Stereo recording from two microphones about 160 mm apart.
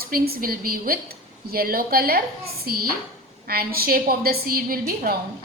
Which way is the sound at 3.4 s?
70° right (ahead or behind).